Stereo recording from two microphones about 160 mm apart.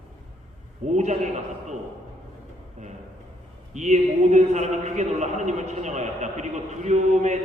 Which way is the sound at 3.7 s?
45° right (ahead or behind).